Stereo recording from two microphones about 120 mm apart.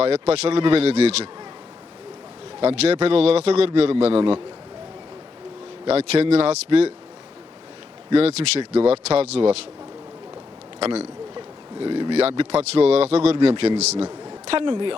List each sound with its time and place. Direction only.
0.0 s a man's voice: 60° right (ahead or behind)
2.6 s a man's voice: 60° right (ahead or behind)
5.9 s a man's voice: 60° right (ahead or behind)
8.1 s a man's voice: 55° right (ahead or behind)
10.8 s speech: 60° right (ahead or behind)
11.3 s a sound: 40° right (ahead or behind)
12.4 s a man's voice: 60° right (ahead or behind)
14.4 s a woman's voice: 50° right (ahead or behind)